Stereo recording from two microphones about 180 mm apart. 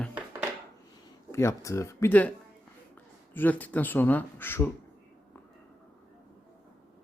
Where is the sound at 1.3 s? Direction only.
15° left (ahead or behind).